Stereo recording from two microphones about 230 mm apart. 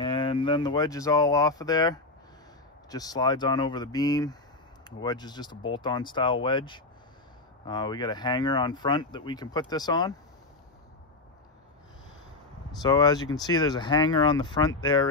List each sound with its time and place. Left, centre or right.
0.0 s speech: left
12.8 s speech: centre